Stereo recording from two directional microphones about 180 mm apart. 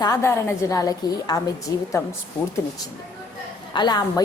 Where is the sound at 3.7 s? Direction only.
25° left (ahead or behind).